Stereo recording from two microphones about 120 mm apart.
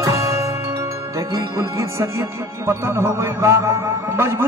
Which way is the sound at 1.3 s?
25° right (ahead or behind).